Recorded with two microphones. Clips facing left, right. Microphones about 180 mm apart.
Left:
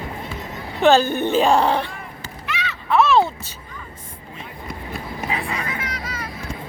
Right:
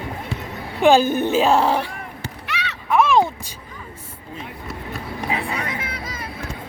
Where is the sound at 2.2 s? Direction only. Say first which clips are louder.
Left 1 dB; 70° right (ahead or behind).